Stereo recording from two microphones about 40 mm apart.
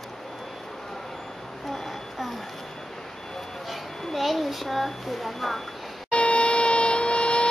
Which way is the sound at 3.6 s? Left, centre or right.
Centre.